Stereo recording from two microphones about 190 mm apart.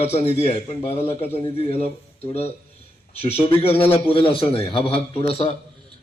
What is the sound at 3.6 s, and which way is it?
A man's voice, 30° left (ahead or behind).